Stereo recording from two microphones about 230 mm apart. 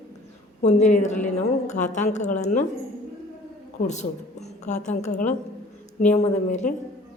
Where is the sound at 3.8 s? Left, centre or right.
Left.